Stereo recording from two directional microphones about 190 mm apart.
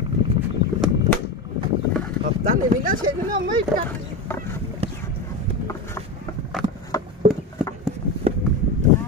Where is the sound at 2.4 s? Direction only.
45° right (ahead or behind).